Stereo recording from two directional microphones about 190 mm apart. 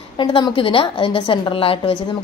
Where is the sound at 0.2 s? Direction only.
25° left (ahead or behind).